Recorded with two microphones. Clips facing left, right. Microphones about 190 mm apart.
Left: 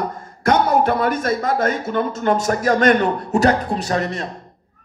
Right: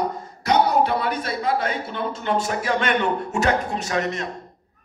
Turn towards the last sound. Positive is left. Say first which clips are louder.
# left 3 dB
turn(degrees=35)  # may be behind; listen again after turning